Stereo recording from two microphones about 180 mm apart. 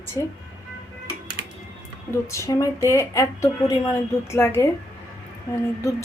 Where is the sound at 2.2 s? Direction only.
15° left (ahead or behind).